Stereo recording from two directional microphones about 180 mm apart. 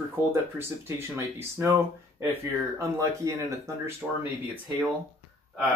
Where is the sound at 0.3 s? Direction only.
15° right (ahead or behind).